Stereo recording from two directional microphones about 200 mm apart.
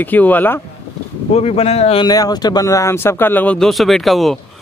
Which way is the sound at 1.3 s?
30° left (ahead or behind).